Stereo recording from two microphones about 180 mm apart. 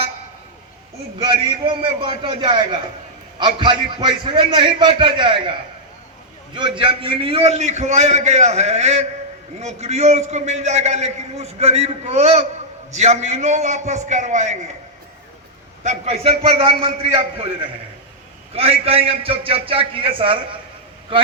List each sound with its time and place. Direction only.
1.2 s a man's voice: 25° right (ahead or behind)
15.8 s a man's voice: 40° right (ahead or behind)